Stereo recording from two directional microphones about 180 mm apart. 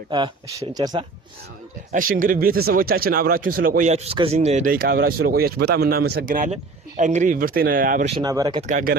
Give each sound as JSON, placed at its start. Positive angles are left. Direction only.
{"t": 0.1, "sound": "speech", "side_deg": -25}
{"t": 1.9, "sound": "speech", "side_deg": -50}
{"t": 8.1, "sound": "speech", "side_deg": -20}
{"t": 8.6, "sound": "speech", "side_deg": -50}